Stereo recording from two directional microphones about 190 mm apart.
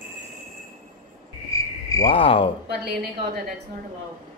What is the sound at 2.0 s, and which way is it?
Speech, 30° left (ahead or behind).